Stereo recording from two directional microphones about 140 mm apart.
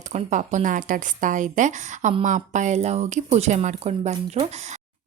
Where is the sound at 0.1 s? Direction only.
60° right (ahead or behind).